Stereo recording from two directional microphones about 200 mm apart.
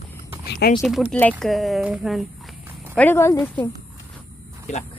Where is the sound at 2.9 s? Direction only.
10° left (ahead or behind).